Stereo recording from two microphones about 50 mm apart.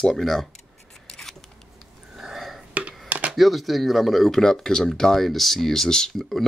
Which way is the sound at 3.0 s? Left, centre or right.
Right.